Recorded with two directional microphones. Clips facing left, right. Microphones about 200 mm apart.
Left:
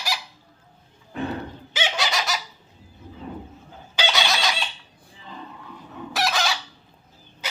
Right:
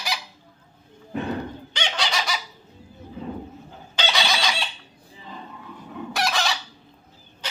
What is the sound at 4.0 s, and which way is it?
Fowl, centre (ahead or behind).